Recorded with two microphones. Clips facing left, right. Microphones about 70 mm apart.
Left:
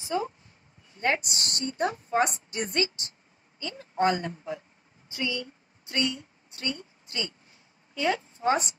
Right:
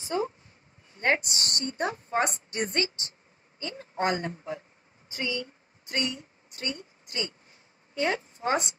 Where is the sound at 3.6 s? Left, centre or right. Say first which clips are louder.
Left 3 dB; right.